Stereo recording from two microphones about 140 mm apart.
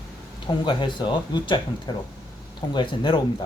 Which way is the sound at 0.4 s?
35° left (ahead or behind).